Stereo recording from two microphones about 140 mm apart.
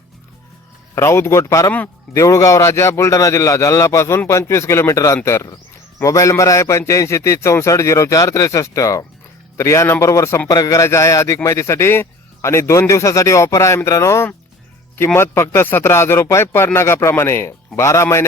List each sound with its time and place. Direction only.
0.9 s a man's voice: 20° left (ahead or behind)